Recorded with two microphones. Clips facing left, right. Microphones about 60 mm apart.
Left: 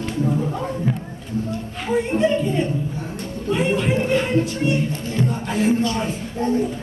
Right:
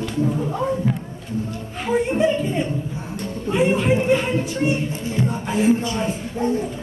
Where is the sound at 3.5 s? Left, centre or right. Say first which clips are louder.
Right 2 dB; right.